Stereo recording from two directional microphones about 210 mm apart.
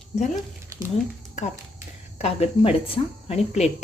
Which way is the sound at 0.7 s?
15° right (ahead or behind).